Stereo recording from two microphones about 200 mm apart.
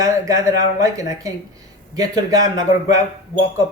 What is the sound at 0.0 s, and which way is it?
Speech, 15° right (ahead or behind).